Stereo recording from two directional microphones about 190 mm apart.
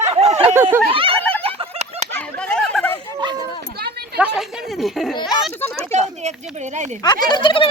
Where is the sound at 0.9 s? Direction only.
30° right (ahead or behind).